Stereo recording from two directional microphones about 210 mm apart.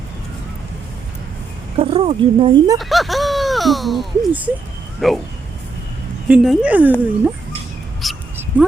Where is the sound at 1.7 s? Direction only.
25° right (ahead or behind).